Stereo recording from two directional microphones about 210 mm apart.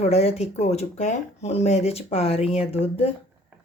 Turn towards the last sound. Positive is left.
turn(degrees=25)  # may be behind; listen again after turning